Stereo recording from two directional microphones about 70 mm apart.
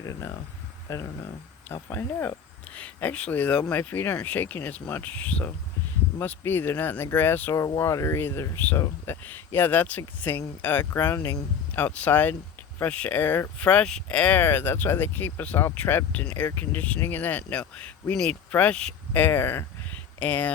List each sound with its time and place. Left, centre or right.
0.0 s speech: left
1.7 s speech: left
2.7 s speech: left
5.2 s speech: centre
6.1 s speech: left
7.8 s speech: left
11.7 s speech: left
13.6 s speech: centre
14.3 s speech: left
19.1 s speech: left
20.1 s speech: left